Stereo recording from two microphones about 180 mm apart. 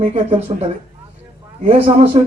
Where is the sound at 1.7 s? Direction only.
30° right (ahead or behind).